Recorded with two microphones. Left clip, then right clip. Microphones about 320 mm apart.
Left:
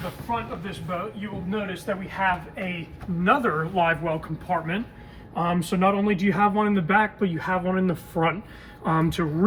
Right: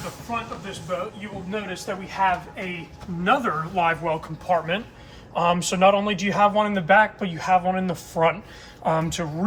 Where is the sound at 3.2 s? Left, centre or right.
Centre.